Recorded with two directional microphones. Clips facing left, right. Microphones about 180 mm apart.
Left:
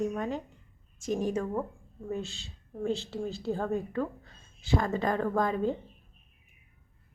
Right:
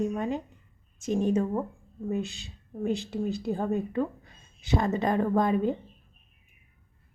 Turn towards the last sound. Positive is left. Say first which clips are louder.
# right 3 dB
turn(degrees=-20)  # may be behind; listen again after turning